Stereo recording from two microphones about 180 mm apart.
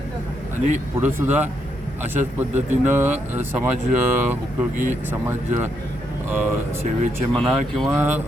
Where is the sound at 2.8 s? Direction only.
10° right (ahead or behind).